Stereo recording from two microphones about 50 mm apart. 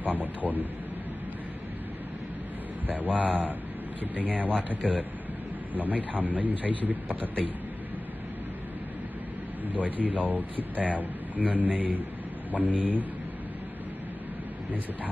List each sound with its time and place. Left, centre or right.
0.0 s a sound: right
2.9 s a man's voice: right
9.7 s speech: right